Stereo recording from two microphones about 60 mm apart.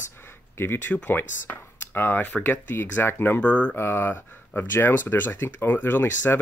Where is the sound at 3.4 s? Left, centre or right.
Left.